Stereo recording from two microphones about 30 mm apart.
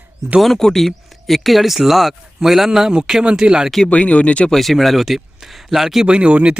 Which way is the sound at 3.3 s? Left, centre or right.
Right.